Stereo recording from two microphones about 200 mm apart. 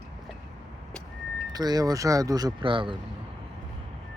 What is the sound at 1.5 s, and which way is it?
Speech, 20° right (ahead or behind).